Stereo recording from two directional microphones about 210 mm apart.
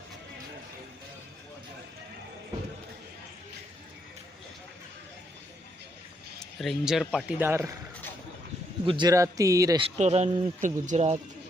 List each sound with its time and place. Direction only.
6.4 s speech: centre (ahead or behind)
8.9 s a man's voice: 20° right (ahead or behind)